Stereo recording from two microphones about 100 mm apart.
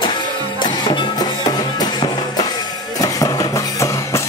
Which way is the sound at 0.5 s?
50° left (ahead or behind).